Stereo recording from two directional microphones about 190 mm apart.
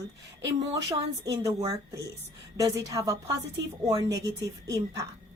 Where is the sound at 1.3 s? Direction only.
15° right (ahead or behind).